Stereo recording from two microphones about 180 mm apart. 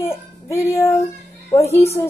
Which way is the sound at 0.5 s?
15° left (ahead or behind).